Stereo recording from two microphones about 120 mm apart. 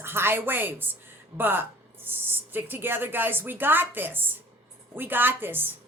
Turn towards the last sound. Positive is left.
turn(degrees=-15)  # may be behind; listen again after turning